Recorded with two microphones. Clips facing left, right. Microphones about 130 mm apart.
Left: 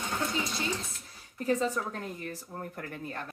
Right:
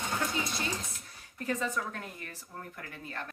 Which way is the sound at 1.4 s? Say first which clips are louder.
Left 4 dB; 30° left (ahead or behind).